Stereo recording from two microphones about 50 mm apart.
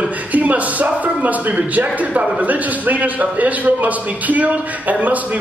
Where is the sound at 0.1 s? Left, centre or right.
Right.